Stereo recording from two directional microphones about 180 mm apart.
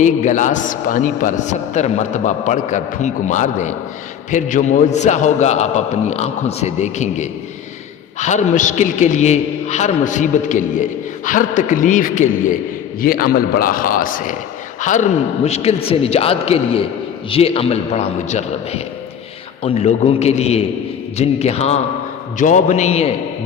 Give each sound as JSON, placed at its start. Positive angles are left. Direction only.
{"t": 0.0, "sound": "a man's voice", "side_deg": 45}